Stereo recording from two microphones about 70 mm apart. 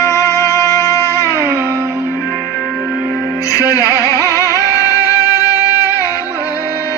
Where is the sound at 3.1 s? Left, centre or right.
Left.